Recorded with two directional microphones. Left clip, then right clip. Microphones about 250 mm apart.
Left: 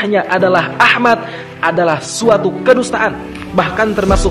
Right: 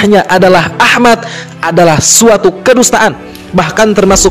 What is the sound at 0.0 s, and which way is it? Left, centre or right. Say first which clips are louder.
A man's voice: right 7 dB; right.